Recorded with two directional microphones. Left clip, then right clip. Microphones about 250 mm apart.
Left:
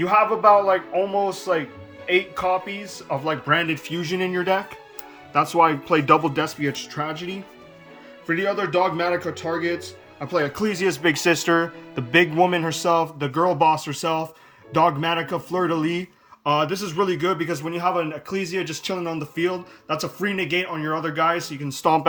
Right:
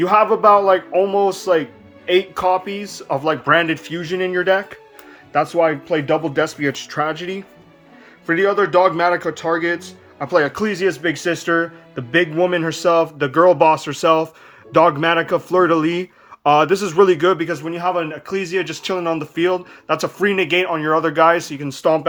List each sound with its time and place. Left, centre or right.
0.0 s a man's voice: right; by 6.4 s centre
6.4 s a man's voice: centre